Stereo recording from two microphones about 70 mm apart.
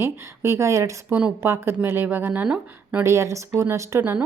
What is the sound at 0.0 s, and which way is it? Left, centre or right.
Speech, right.